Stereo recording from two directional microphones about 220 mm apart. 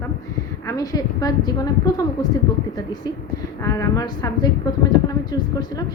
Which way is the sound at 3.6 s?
15° left (ahead or behind).